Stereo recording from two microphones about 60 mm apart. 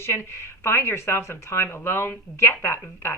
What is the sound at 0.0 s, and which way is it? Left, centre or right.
A woman's voice, left.